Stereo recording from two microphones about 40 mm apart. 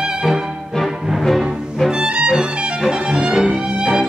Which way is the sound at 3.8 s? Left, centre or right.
Centre.